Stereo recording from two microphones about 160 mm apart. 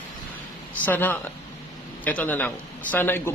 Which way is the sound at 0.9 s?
10° left (ahead or behind).